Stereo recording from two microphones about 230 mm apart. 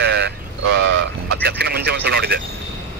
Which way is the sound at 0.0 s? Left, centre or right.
Right.